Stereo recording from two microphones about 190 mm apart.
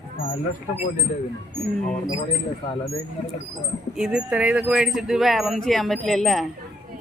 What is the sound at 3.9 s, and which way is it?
Speech, 5° right (ahead or behind).